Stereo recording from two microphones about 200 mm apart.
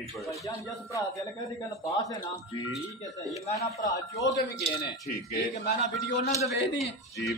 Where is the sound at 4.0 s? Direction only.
15° left (ahead or behind).